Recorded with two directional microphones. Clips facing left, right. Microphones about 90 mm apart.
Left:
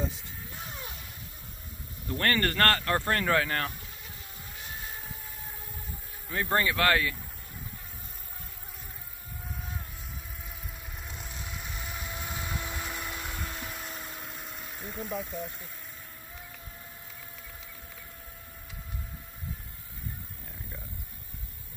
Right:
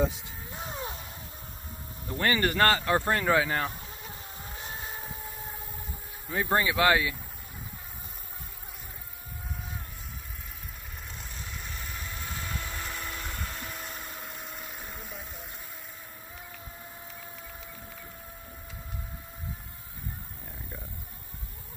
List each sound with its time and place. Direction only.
0.5 s a sound: 25° right (ahead or behind)
2.1 s speech: 10° right (ahead or behind)
4.0 s vehicle: 30° right (ahead or behind)
6.2 s speech: 10° right (ahead or behind)
11.1 s vehicle: 5° left (ahead or behind)